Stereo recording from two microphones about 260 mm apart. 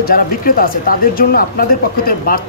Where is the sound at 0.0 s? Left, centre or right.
Left.